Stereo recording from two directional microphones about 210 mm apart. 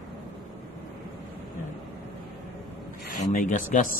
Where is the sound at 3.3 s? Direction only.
40° left (ahead or behind).